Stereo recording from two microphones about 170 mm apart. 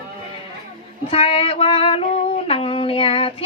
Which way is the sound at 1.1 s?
35° left (ahead or behind).